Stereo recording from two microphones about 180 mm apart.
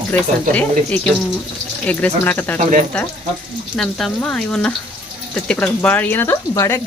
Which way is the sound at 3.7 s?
5° left (ahead or behind).